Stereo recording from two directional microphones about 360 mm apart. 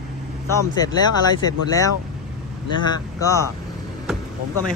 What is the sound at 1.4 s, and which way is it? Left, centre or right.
Speech, centre.